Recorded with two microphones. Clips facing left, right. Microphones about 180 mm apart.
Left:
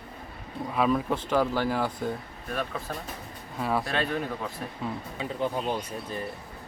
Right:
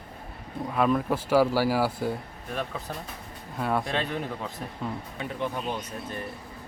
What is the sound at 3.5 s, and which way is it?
Speech, centre (ahead or behind).